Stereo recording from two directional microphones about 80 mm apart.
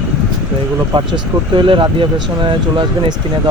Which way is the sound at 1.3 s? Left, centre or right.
Right.